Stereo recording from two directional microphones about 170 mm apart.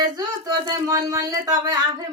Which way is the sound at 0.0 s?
25° right (ahead or behind).